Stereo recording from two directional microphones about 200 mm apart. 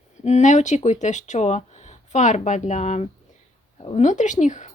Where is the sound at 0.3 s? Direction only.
35° left (ahead or behind).